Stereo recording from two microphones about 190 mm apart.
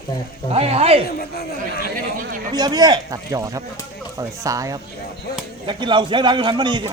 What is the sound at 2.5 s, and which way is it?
Speech, 20° right (ahead or behind).